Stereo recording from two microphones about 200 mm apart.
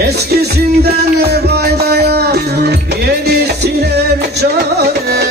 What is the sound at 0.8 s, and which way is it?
Music, 50° right (ahead or behind).